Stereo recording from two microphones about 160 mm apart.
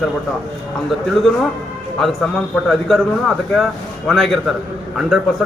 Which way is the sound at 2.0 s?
Centre (ahead or behind).